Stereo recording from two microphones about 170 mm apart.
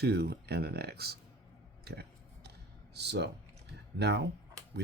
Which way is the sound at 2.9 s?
80° right.